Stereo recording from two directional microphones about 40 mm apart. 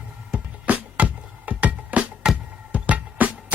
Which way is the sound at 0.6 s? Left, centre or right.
Right.